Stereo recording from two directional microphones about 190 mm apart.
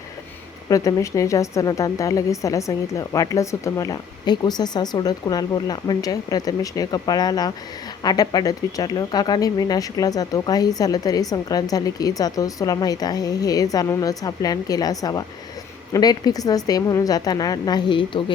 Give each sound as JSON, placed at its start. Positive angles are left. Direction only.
{"t": 0.7, "sound": "a woman's voice", "side_deg": 15}